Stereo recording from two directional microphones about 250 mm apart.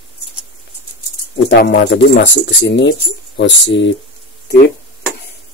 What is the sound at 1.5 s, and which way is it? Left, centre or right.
Speech, left.